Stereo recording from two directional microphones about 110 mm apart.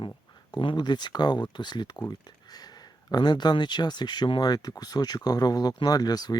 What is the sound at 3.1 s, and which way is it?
Speech, 40° left (ahead or behind).